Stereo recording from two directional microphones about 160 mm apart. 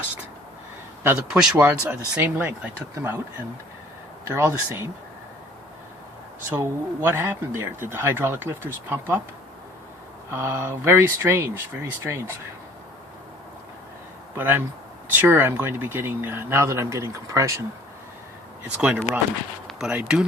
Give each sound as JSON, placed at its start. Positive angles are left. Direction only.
{"t": 1.0, "sound": "speech", "side_deg": -5}
{"t": 4.4, "sound": "speech", "side_deg": -15}
{"t": 6.5, "sound": "speech", "side_deg": -15}
{"t": 10.3, "sound": "speech", "side_deg": -15}
{"t": 14.3, "sound": "speech", "side_deg": -10}
{"t": 18.8, "sound": "speech", "side_deg": -10}
{"t": 19.6, "sound": "a sound", "side_deg": 0}
{"t": 20.0, "sound": "speech", "side_deg": -5}